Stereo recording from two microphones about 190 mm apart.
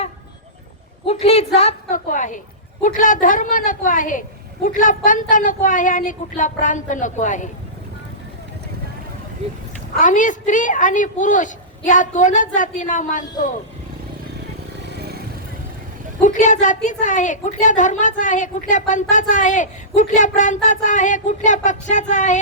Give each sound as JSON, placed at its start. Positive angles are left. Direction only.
{"t": 1.0, "sound": "a woman's voice", "side_deg": 30}
{"t": 10.0, "sound": "a woman's voice", "side_deg": 40}
{"t": 14.9, "sound": "vehicle", "side_deg": -55}
{"t": 16.2, "sound": "a woman's voice", "side_deg": 40}